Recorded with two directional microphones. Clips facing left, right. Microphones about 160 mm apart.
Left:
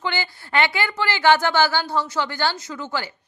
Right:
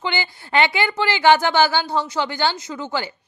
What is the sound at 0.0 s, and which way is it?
A woman's voice, 20° right (ahead or behind).